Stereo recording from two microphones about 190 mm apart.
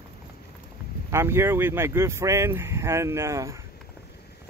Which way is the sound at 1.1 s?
15° right (ahead or behind).